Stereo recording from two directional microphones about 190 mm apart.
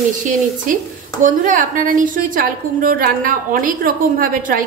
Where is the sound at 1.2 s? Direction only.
45° right (ahead or behind).